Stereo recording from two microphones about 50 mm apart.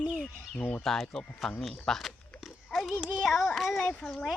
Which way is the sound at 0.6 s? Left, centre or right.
Left.